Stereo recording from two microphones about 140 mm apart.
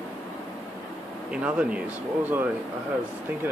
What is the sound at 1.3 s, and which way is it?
Speech, 10° right (ahead or behind).